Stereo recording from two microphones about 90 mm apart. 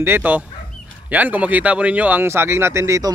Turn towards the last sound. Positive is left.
turn(degrees=-35)  # may be behind; listen again after turning